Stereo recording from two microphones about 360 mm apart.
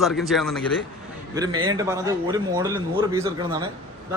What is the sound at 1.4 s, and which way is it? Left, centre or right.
A man's voice, centre.